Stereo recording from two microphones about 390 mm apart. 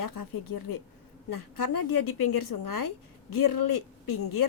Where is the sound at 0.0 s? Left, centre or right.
Left.